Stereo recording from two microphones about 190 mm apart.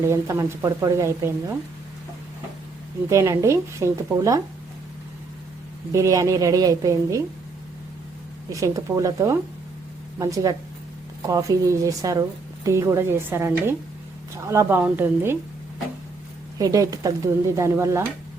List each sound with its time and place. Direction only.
0.0 s a woman's voice: 15° right (ahead or behind)
3.1 s a woman's voice: 15° right (ahead or behind)
5.9 s a woman's voice: 15° right (ahead or behind)
8.4 s a woman's voice: 15° right (ahead or behind)
16.6 s a woman's voice: 20° right (ahead or behind)